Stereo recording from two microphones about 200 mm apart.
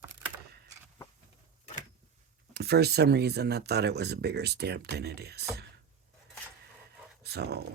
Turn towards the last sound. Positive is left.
turn(degrees=-55)  # may be behind; listen again after turning